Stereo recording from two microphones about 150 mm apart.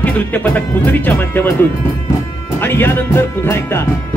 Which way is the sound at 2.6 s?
15° left (ahead or behind).